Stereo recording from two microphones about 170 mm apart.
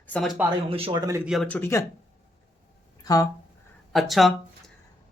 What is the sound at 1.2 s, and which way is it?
Speech, centre (ahead or behind).